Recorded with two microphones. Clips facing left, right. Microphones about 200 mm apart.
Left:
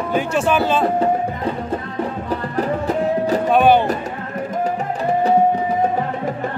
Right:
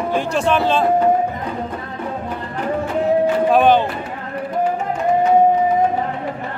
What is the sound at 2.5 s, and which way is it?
Music, 40° left (ahead or behind).